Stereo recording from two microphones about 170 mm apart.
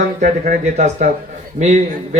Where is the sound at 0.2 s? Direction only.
50° right (ahead or behind).